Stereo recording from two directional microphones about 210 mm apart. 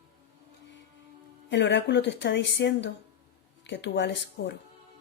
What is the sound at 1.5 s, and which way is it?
Speech, 55° left (ahead or behind).